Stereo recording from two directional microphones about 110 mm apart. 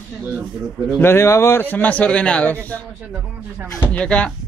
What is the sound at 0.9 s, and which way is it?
A man's voice, 20° left (ahead or behind).